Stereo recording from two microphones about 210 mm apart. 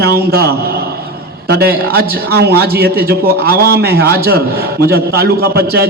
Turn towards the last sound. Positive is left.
turn(degrees=-50)  # may be behind; listen again after turning